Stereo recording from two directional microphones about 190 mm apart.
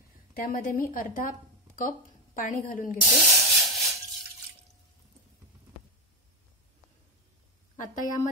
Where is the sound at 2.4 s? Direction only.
45° left (ahead or behind).